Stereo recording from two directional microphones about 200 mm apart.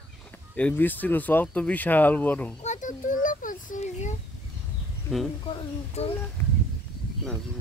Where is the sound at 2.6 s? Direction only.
35° left (ahead or behind).